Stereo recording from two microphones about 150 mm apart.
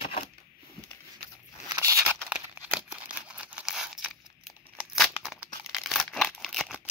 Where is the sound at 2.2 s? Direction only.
5° right (ahead or behind).